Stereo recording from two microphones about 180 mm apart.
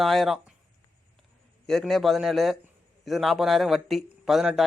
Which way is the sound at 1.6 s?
Centre (ahead or behind).